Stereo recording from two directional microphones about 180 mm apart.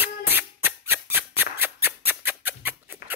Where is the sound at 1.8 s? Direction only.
10° right (ahead or behind).